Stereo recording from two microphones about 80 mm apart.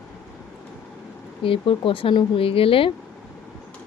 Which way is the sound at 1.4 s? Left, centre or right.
Left.